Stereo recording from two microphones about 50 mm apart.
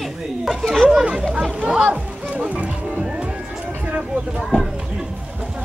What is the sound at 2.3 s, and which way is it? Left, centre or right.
Speech, right.